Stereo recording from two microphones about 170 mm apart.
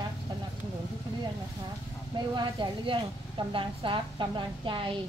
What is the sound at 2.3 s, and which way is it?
A woman's voice, 25° right (ahead or behind).